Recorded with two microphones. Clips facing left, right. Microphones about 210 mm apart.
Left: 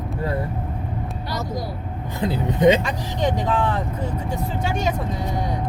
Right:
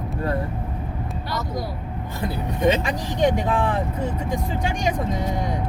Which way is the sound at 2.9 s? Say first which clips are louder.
Right 3 dB; 15° right (ahead or behind).